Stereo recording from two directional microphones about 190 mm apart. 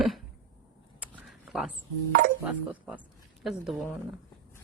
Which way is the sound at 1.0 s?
Centre (ahead or behind).